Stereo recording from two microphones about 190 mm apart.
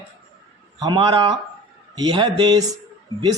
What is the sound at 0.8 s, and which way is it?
Speech, 20° right (ahead or behind).